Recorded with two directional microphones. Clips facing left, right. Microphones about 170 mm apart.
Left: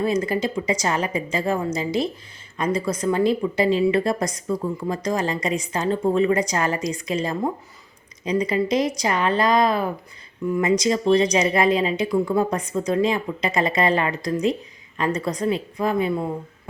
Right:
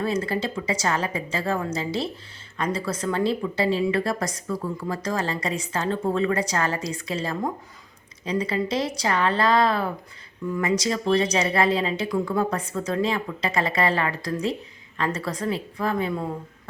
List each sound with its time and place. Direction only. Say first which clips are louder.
0.0 s speech: left 3 dB; 15° left (ahead or behind)